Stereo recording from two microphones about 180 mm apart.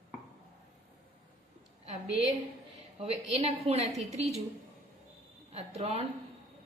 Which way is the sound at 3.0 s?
35° right (ahead or behind).